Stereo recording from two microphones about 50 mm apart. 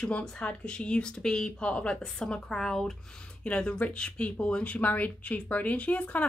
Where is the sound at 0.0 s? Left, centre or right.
Centre.